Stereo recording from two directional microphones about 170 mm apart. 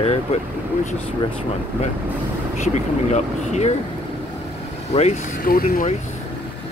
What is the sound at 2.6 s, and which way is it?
Speech, 45° left (ahead or behind).